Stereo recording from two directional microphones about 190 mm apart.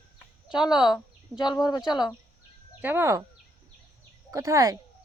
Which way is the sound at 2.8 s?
10° right (ahead or behind).